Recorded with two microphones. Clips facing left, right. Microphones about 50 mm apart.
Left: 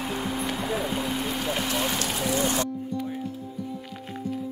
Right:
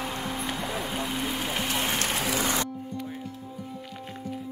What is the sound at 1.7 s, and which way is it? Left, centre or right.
Fire, right.